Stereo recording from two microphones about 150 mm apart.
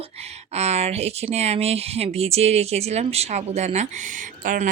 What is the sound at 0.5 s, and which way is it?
Speech, 45° right (ahead or behind).